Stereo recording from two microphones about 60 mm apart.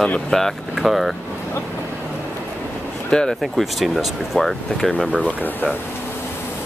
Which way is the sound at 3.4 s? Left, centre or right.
Centre.